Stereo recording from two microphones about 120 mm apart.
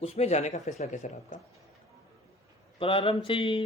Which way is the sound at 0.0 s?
65° left (ahead or behind).